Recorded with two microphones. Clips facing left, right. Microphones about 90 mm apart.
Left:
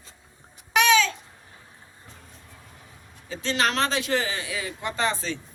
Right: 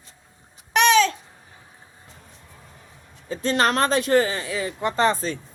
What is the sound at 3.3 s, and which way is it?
Speech, 45° right (ahead or behind).